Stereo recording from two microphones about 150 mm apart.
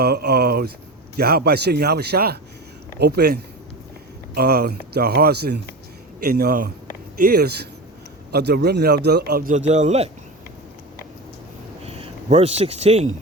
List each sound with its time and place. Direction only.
0.0 s speech: 90° right
7.2 s speech: 90° right
9.6 s a man's voice: 50° right (ahead or behind)
11.8 s a sound: 40° right (ahead or behind)